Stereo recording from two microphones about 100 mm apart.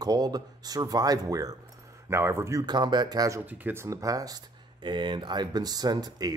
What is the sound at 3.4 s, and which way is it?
Speech, 20° right (ahead or behind).